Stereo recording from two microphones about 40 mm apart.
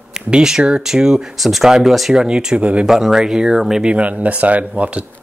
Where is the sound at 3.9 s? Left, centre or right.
Right.